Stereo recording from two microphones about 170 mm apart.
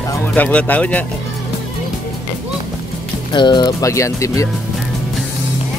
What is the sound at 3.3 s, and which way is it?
Speech, 25° left (ahead or behind).